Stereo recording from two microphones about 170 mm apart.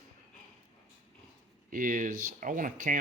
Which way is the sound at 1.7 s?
50° right (ahead or behind).